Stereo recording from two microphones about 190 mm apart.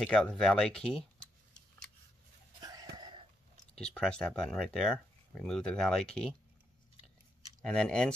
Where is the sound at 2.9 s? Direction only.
20° right (ahead or behind).